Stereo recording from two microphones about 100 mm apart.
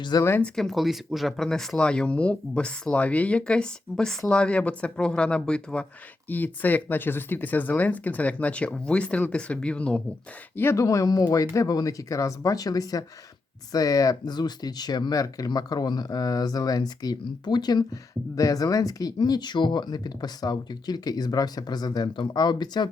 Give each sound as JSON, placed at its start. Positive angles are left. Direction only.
{"t": 0.2, "sound": "speech", "side_deg": 25}
{"t": 0.4, "sound": "speech", "side_deg": 5}
{"t": 10.6, "sound": "speech", "side_deg": 30}